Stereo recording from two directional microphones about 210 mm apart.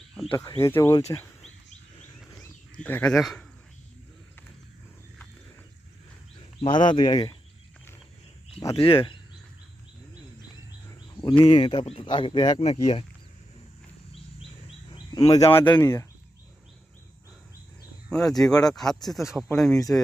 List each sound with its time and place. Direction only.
0.1 s speech: centre (ahead or behind)
0.6 s speech: 15° left (ahead or behind)
2.7 s speech: 5° left (ahead or behind)
6.6 s speech: 20° left (ahead or behind)
8.6 s speech: 20° left (ahead or behind)
11.4 s speech: 25° left (ahead or behind)
14.9 s speech: 20° left (ahead or behind)
18.1 s speech: centre (ahead or behind)